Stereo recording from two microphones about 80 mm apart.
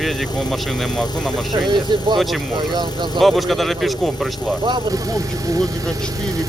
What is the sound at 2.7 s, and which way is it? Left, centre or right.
Speech, right.